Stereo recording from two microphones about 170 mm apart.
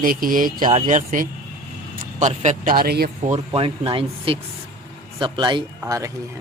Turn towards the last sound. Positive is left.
turn(degrees=-20)  # may be behind; listen again after turning